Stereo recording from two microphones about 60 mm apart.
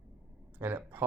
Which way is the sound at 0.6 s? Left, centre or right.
Right.